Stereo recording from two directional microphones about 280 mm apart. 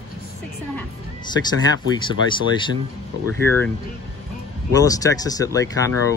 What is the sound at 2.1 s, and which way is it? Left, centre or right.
Speech, centre.